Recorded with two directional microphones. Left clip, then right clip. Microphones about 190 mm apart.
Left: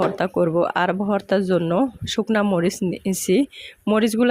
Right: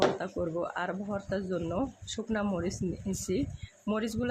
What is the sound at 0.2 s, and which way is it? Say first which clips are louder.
Speech: left 14 dB; 45° left (ahead or behind).